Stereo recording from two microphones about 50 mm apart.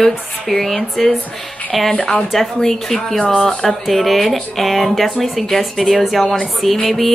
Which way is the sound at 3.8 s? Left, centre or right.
Centre.